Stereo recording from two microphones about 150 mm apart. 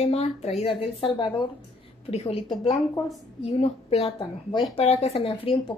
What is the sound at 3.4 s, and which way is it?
A woman's voice, 40° left (ahead or behind).